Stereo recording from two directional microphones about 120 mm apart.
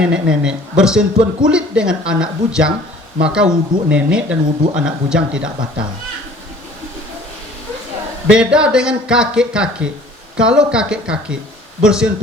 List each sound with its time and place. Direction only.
0.0 s speech: 10° right (ahead or behind)
8.3 s a man's voice: 5° right (ahead or behind)